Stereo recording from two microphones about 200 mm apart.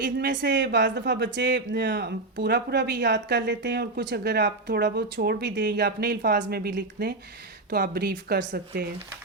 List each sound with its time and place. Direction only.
0.0 s speech: 60° right (ahead or behind)